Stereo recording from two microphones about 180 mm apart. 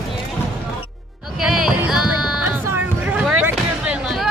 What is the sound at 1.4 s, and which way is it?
Music, 5° right (ahead or behind).